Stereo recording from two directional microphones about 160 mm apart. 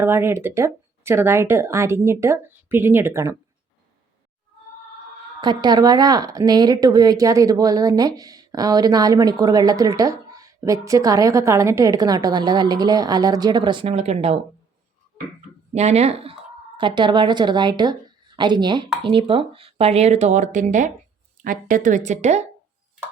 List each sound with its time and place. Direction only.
0.0 s speech: 15° right (ahead or behind)
5.4 s speech: 25° right (ahead or behind); by 14.3 s 45° right (ahead or behind)
15.7 s speech: 45° right (ahead or behind)